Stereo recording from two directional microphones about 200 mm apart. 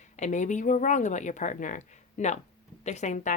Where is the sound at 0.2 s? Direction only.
40° left (ahead or behind).